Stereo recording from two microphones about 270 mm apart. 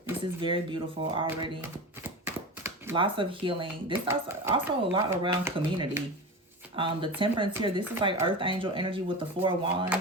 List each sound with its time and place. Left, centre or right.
0.0 s speech: centre
2.0 s a sound: centre
4.0 s speech: centre